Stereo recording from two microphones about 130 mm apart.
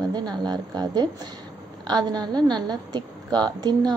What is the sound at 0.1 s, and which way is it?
A woman's voice, 35° right (ahead or behind).